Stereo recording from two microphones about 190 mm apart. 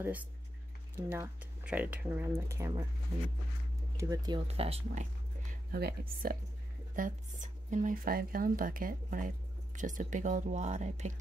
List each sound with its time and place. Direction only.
0.0 s speech: 10° right (ahead or behind)
3.9 s speech: 15° right (ahead or behind)
4.5 s speech: 30° right (ahead or behind)
5.5 s speech: 55° right (ahead or behind)
7.0 s speech: 45° right (ahead or behind)